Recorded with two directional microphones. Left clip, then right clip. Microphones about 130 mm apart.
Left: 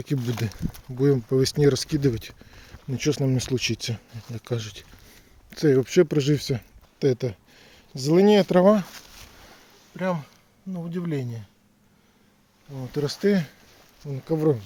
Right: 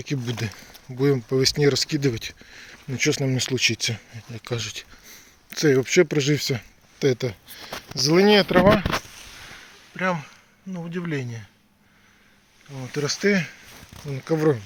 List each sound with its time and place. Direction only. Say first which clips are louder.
0.1 s speech: left 2 dB; 50° left (ahead or behind)
0.9 s speech: even; 35° left (ahead or behind)
1.3 s speech: right 1 dB; 45° left (ahead or behind); by 5.8 s 25° left (ahead or behind)
5.8 s speech: right 1 dB; 40° left (ahead or behind)
8.4 s speech: right 1 dB; 55° left (ahead or behind)
9.9 s a sound: right 3 dB; 10° left (ahead or behind)
10.8 s speech: right 1 dB; 5° left (ahead or behind)
12.9 s speech: right 2 dB; 30° left (ahead or behind)
14.0 s speech: right 2 dB; centre (ahead or behind)